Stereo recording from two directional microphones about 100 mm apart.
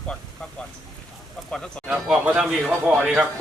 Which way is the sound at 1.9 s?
10° right (ahead or behind).